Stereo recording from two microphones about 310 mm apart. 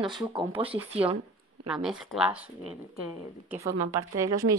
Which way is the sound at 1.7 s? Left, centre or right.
Centre.